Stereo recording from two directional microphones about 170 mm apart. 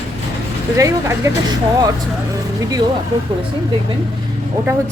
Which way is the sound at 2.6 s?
20° right (ahead or behind).